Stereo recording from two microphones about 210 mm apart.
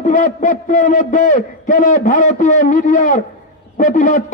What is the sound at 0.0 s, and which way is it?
A man's voice, 35° left (ahead or behind).